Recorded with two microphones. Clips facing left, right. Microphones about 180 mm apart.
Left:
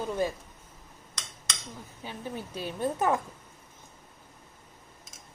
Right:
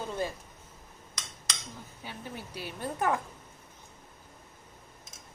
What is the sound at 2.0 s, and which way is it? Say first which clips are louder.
A woman's voice: left 5 dB; 20° left (ahead or behind).